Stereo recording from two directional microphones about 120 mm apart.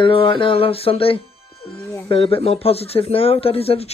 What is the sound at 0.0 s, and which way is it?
Speech, 45° left (ahead or behind).